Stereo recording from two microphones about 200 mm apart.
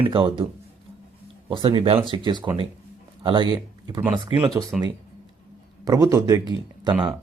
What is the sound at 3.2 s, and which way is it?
Speech, 25° right (ahead or behind).